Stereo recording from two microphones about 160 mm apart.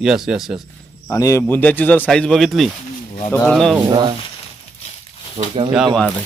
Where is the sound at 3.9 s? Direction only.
30° right (ahead or behind).